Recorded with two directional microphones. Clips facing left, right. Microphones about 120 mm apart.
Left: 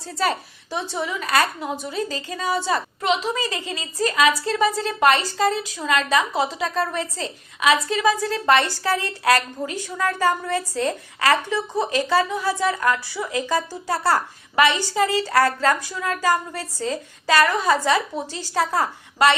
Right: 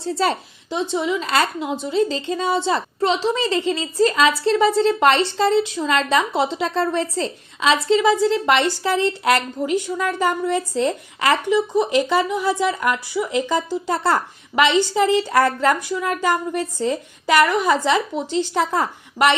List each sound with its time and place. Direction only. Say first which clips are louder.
0.0 s a woman's voice: right 3 dB; 30° right (ahead or behind)